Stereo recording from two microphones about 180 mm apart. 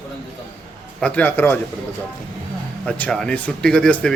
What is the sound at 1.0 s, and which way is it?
Speech, 10° left (ahead or behind).